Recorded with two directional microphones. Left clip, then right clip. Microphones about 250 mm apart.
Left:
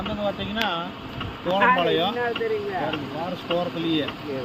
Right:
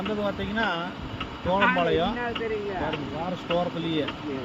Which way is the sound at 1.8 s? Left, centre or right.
Centre.